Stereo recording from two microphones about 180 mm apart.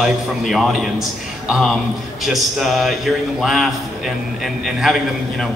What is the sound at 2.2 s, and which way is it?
A man's voice, centre (ahead or behind).